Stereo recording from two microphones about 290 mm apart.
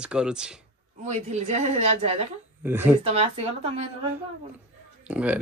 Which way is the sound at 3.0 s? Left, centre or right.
Right.